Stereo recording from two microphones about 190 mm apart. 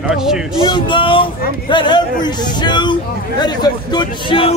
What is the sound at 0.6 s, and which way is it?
A man's voice, 25° left (ahead or behind).